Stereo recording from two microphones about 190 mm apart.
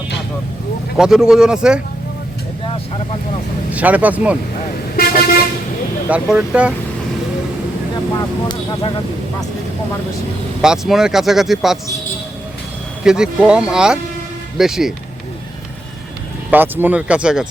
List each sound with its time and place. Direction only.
0.9 s speech: 5° right (ahead or behind)
3.7 s speech: 10° right (ahead or behind)
6.1 s speech: 5° right (ahead or behind)
8.1 s speech: 25° left (ahead or behind)
10.6 s speech: 5° right (ahead or behind)
13.1 s speech: 5° right (ahead or behind)
16.5 s speech: 10° right (ahead or behind)